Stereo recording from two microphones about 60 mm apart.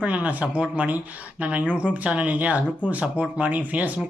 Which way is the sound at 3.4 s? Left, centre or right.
Right.